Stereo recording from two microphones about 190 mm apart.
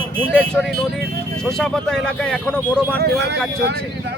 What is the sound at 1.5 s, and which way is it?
Speech, centre (ahead or behind).